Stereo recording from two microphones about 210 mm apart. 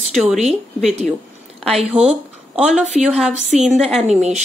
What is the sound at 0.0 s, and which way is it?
A woman's voice, centre (ahead or behind).